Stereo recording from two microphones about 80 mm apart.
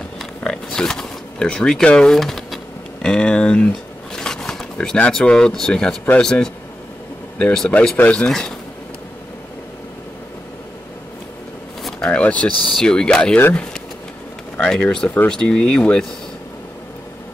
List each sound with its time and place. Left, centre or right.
0.2 s pig: centre
3.7 s a sound: centre
5.1 s speech: centre
12.0 s speech: centre
14.6 s speech: centre